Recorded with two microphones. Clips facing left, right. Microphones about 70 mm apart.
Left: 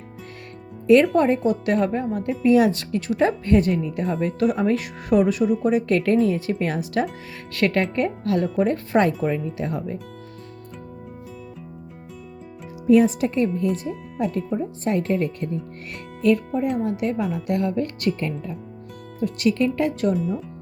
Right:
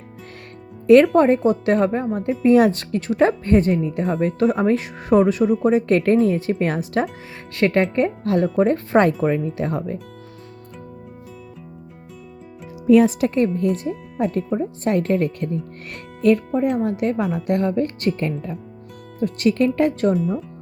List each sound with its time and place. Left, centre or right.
0.9 s speech: right
4.0 s speech: right
4.4 s speech: right
7.5 s speech: right
9.0 s speech: right
13.0 s speech: right
13.4 s speech: right
16.2 s speech: right
18.2 s speech: right
20.1 s speech: centre